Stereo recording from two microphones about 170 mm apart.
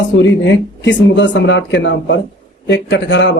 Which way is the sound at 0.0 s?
90° left.